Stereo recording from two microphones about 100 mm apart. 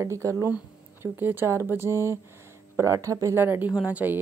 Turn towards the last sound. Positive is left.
turn(degrees=-15)  # may be behind; listen again after turning